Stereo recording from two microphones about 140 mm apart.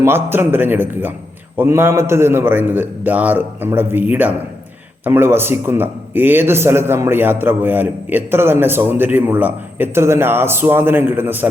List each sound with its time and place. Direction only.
0.0 s a man's voice: 15° right (ahead or behind)